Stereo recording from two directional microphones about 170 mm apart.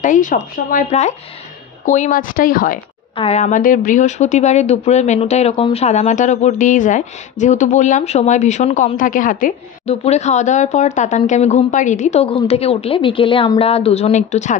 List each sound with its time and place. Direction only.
0.0 s speech: 50° left (ahead or behind)
3.2 s speech: 40° left (ahead or behind)